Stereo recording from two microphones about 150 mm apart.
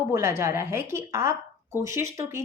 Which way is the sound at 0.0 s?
15° right (ahead or behind).